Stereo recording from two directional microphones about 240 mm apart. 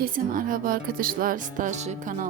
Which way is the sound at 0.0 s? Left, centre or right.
Right.